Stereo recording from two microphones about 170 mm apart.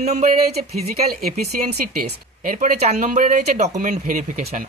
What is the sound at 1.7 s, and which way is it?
Speech, 65° right (ahead or behind).